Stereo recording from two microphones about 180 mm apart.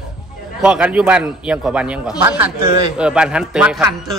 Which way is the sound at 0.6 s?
5° right (ahead or behind).